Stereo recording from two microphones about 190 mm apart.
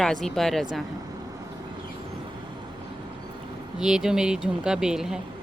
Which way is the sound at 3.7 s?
5° right (ahead or behind).